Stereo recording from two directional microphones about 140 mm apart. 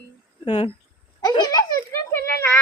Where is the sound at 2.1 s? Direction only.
15° left (ahead or behind).